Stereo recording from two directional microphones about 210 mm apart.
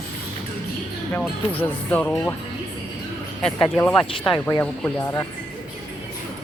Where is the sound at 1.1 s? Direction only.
10° left (ahead or behind).